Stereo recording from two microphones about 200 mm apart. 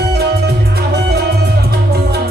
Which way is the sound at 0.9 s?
50° right (ahead or behind).